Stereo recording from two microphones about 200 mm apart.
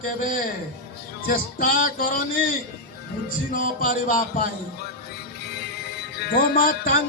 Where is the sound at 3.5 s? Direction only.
40° left (ahead or behind).